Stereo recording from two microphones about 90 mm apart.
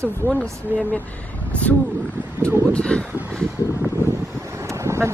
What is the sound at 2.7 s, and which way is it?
Speech, 15° left (ahead or behind).